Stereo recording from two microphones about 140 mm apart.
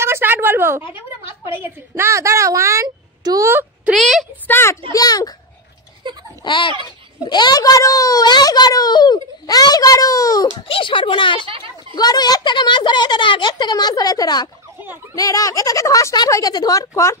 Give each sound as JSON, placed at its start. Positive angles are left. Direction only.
{"t": 0.0, "sound": "a sound", "side_deg": -15}
{"t": 1.5, "sound": "a woman's voice", "side_deg": -15}
{"t": 3.9, "sound": "a woman's voice", "side_deg": 0}
{"t": 4.5, "sound": "a child's voice", "side_deg": 15}
{"t": 4.9, "sound": "a child's voice", "side_deg": 25}
{"t": 6.0, "sound": "a child's voice", "side_deg": -35}
{"t": 6.4, "sound": "a child's voice", "side_deg": 35}
{"t": 10.7, "sound": "a child's voice", "side_deg": 35}
{"t": 11.4, "sound": "a child's voice", "side_deg": -40}
{"t": 11.9, "sound": "a child's voice", "side_deg": 30}